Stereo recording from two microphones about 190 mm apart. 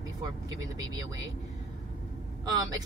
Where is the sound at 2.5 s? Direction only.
20° right (ahead or behind).